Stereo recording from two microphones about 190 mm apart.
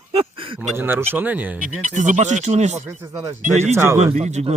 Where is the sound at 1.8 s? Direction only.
40° right (ahead or behind).